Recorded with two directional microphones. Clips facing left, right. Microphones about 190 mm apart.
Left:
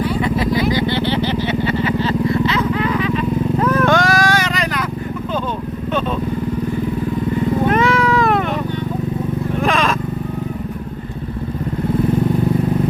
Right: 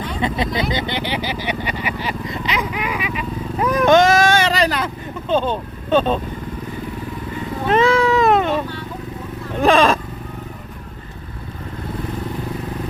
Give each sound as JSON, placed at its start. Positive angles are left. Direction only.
{"t": 0.2, "sound": "vehicle", "side_deg": -20}
{"t": 7.7, "sound": "cat", "side_deg": -25}
{"t": 9.6, "sound": "vehicle", "side_deg": -30}